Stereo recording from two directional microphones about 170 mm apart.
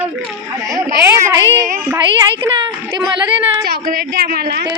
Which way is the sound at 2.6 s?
25° right (ahead or behind).